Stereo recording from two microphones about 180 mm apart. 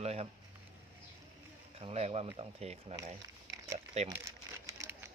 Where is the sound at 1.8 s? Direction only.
35° right (ahead or behind).